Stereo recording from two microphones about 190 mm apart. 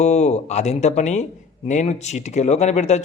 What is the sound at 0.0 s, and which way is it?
Speech, 35° left (ahead or behind).